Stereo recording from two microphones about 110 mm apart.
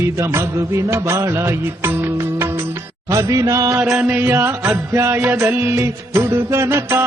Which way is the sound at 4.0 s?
20° right (ahead or behind).